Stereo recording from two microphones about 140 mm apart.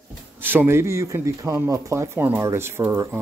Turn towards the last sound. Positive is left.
turn(degrees=-15)  # may be behind; listen again after turning